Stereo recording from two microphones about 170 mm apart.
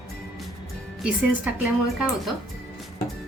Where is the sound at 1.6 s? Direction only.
5° right (ahead or behind).